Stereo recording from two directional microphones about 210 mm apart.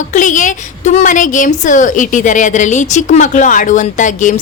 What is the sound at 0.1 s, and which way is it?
A woman's voice, 35° left (ahead or behind).